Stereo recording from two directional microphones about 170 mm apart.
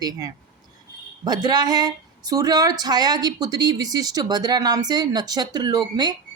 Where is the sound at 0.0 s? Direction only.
20° right (ahead or behind).